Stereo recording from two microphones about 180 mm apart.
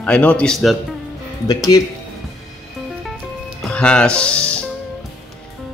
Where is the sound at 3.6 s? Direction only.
5° left (ahead or behind).